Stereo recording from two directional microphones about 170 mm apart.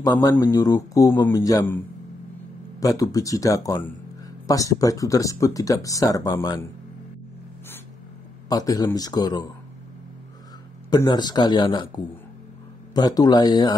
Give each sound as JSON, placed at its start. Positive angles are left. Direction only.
{"t": 0.0, "sound": "speech", "side_deg": 20}
{"t": 2.8, "sound": "speech", "side_deg": 20}
{"t": 8.5, "sound": "speech", "side_deg": 20}
{"t": 10.9, "sound": "speech", "side_deg": 25}